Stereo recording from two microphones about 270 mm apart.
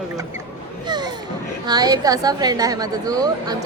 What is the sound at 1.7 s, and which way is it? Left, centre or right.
A woman's voice, centre.